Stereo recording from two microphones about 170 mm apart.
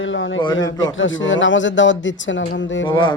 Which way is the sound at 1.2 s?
90° left.